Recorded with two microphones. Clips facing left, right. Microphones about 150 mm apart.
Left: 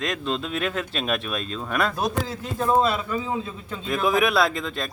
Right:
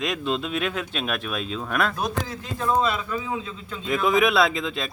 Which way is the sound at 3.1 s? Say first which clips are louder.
Left 2 dB; 25° left (ahead or behind).